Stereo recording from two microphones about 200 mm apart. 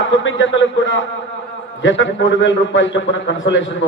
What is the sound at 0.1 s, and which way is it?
A man's voice, 70° left (ahead or behind).